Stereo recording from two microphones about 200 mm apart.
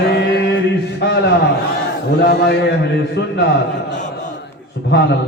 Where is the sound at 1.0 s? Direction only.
55° left (ahead or behind).